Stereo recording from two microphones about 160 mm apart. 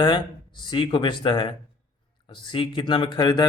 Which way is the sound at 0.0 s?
30° left (ahead or behind).